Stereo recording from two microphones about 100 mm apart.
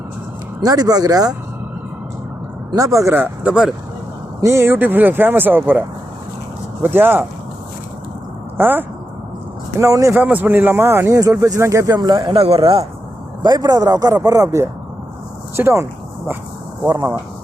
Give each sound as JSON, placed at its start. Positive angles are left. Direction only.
{"t": 0.6, "sound": "speech", "side_deg": -40}
{"t": 2.7, "sound": "speech", "side_deg": -35}
{"t": 3.1, "sound": "speech", "side_deg": -15}
{"t": 4.4, "sound": "speech", "side_deg": -30}
{"t": 6.8, "sound": "speech", "side_deg": -20}
{"t": 8.5, "sound": "speech", "side_deg": -20}
{"t": 9.8, "sound": "speech", "side_deg": -30}
{"t": 10.2, "sound": "speech", "side_deg": -15}
{"t": 12.4, "sound": "speech", "side_deg": -75}
{"t": 13.4, "sound": "speech", "side_deg": -40}